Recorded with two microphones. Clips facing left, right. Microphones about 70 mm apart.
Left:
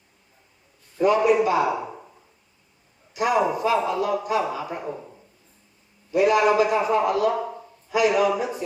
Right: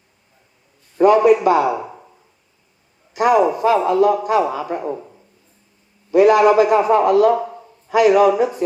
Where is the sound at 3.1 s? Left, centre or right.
Right.